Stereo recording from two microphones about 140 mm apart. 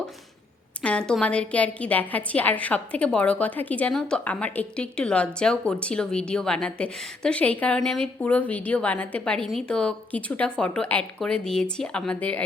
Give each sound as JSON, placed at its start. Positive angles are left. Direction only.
{"t": 0.8, "sound": "a woman's voice", "side_deg": 5}